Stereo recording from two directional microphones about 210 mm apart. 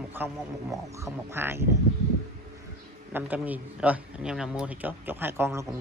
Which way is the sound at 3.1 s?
10° right (ahead or behind).